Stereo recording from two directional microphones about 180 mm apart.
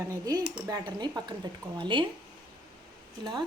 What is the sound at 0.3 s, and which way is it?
Speech, 20° right (ahead or behind).